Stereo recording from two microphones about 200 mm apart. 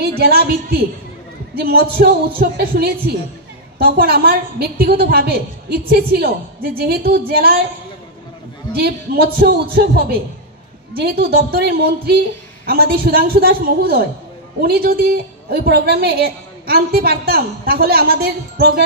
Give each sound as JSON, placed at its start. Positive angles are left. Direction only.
{"t": 0.2, "sound": "a woman's voice", "side_deg": -50}
{"t": 8.7, "sound": "a woman's voice", "side_deg": -50}